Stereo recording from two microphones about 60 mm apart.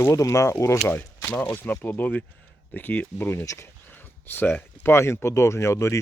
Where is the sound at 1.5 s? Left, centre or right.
Left.